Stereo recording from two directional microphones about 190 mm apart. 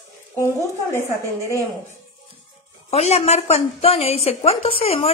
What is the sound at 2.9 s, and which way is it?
A woman's voice, 35° left (ahead or behind).